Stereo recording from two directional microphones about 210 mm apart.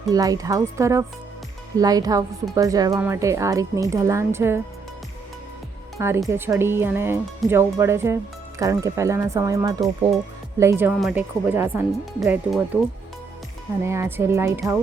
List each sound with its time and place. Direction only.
0.1 s speech: 15° right (ahead or behind)
6.0 s speech: 10° right (ahead or behind)
13.8 s speech: 10° right (ahead or behind)